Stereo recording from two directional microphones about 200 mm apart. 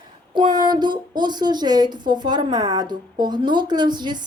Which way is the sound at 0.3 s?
20° right (ahead or behind).